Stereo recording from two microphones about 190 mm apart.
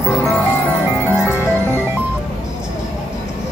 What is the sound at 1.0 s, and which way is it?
Music, 10° left (ahead or behind).